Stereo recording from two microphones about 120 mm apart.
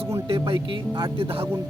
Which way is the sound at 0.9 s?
40° right (ahead or behind).